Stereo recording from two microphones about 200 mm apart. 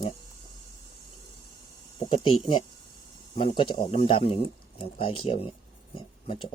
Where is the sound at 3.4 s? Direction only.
25° left (ahead or behind).